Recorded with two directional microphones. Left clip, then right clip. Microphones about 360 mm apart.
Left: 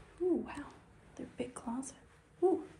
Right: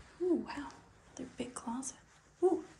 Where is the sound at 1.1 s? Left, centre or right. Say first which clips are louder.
Left 1 dB; centre.